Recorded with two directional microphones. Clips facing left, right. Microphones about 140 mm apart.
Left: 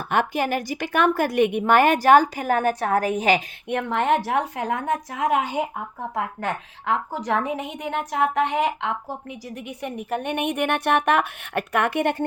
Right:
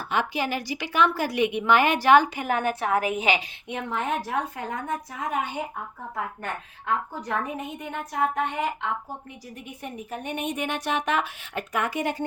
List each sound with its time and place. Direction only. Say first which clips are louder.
0.1 s a woman's voice: left 4 dB; 50° left (ahead or behind)
3.7 s a woman's voice: left 7 dB; 60° left (ahead or behind); by 9.1 s 90° left
9.8 s a woman's voice: left 7 dB; 70° left (ahead or behind)